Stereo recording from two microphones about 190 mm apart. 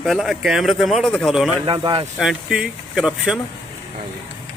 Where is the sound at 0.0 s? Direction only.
Centre (ahead or behind).